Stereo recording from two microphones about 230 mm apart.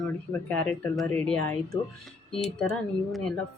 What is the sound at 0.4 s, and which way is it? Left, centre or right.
Speech, centre.